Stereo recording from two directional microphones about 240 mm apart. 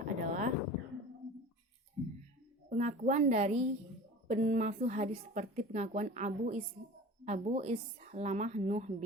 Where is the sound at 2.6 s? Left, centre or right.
Right.